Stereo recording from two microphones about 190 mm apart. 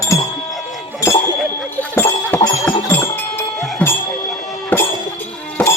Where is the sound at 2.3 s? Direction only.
10° left (ahead or behind).